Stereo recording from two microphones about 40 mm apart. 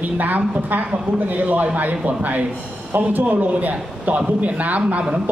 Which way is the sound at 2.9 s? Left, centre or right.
Right.